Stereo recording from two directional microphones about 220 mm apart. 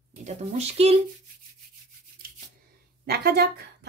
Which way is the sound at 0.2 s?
30° right (ahead or behind).